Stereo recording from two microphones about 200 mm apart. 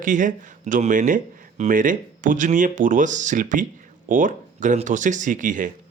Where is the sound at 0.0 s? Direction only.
40° right (ahead or behind).